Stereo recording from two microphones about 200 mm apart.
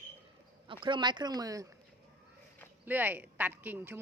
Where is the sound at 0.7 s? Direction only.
25° right (ahead or behind).